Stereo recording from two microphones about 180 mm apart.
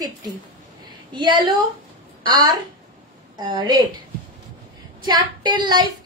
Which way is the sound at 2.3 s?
20° right (ahead or behind).